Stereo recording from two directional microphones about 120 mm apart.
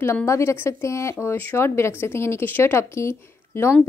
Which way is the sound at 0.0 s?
20° left (ahead or behind).